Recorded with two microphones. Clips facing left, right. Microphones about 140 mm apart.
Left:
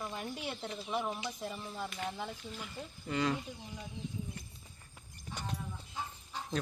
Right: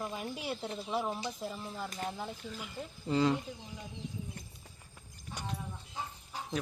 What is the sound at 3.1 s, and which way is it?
Speech, 25° right (ahead or behind).